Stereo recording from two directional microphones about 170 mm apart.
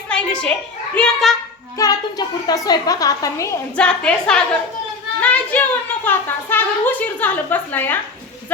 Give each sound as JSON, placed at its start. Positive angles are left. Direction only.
{"t": 0.1, "sound": "a woman's voice", "side_deg": 5}
{"t": 1.8, "sound": "a woman's voice", "side_deg": 25}
{"t": 3.8, "sound": "a woman's voice", "side_deg": 5}